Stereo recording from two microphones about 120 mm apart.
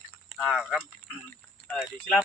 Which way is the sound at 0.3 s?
5° right (ahead or behind).